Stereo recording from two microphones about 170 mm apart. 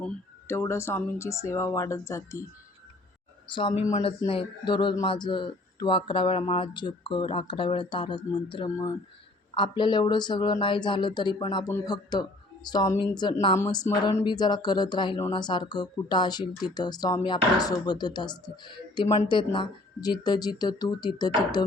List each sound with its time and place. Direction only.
0.0 s speech: 15° left (ahead or behind)
3.5 s speech: 30° left (ahead or behind)